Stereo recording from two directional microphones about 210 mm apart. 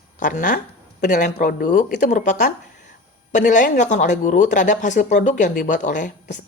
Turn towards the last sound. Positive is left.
turn(degrees=35)  # may be behind; listen again after turning